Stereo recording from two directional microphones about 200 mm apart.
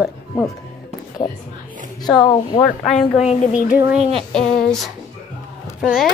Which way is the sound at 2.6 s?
Centre (ahead or behind).